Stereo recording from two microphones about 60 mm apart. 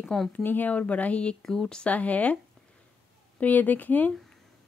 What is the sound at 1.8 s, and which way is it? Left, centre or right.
Speech, left.